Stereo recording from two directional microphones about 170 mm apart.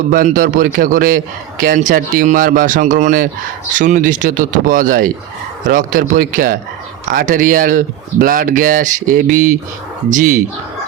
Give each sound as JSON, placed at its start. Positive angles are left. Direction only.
{"t": 0.1, "sound": "a man's voice", "side_deg": -55}